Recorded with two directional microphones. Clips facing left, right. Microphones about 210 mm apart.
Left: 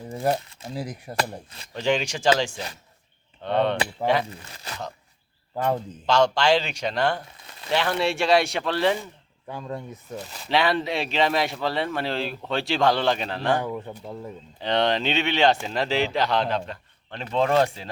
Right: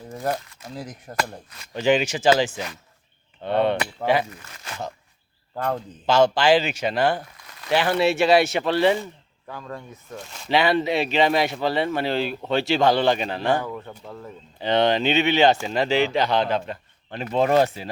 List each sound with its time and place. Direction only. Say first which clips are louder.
0.3 s speech: left 2 dB; 25° left (ahead or behind)
0.7 s speech: left 3 dB; 10° left (ahead or behind)
1.5 s speech: left 1 dB; 30° left (ahead or behind)
1.7 s speech: right 4 dB; 5° right (ahead or behind)
3.4 s speech: right 2 dB; 5° right (ahead or behind)
4.3 s speech: left 1 dB; 30° left (ahead or behind)
6.1 s speech: right 3 dB; 5° right (ahead or behind)
7.3 s a sound: left 1 dB; 25° left (ahead or behind)
7.7 s speech: right 4 dB; 5° right (ahead or behind)
9.5 s speech: left 2 dB; 20° left (ahead or behind)
10.2 s speech: right 2 dB; centre (ahead or behind)
13.6 s speech: left 1 dB; 15° left (ahead or behind)
14.6 s speech: right 3 dB; centre (ahead or behind)